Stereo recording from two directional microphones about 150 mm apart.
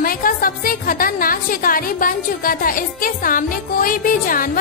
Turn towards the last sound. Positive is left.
turn(degrees=65)  # may be behind; listen again after turning